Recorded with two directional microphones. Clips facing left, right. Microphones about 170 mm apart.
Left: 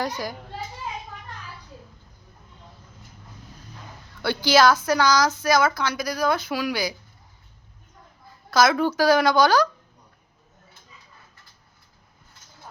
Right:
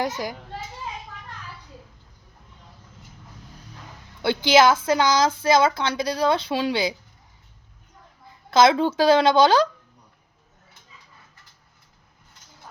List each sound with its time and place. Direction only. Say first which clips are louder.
4.2 s a woman's voice: right 1 dB; 20° right (ahead or behind)
8.4 s a woman's voice: right 2 dB; 20° right (ahead or behind)